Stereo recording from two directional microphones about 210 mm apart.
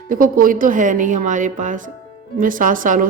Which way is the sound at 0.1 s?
40° right (ahead or behind).